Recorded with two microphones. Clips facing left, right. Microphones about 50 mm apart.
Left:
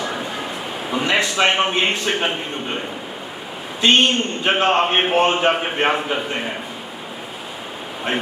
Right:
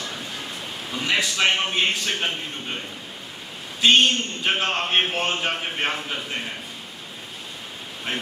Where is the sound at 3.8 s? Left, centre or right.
Centre.